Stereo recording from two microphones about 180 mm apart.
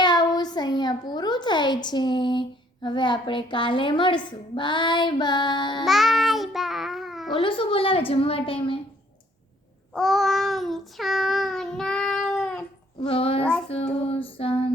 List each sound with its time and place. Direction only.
0.0 s a child's voice: 25° left (ahead or behind)
5.8 s child singing: centre (ahead or behind)
7.4 s a woman's voice: 30° left (ahead or behind)
9.9 s child singing: centre (ahead or behind)
13.0 s a child's voice: 30° left (ahead or behind)
14.0 s female singing: 30° left (ahead or behind)